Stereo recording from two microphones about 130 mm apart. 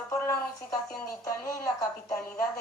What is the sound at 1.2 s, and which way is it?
Speech, 25° left (ahead or behind).